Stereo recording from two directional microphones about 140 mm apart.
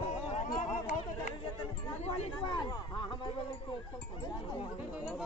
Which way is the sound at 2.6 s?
30° left (ahead or behind).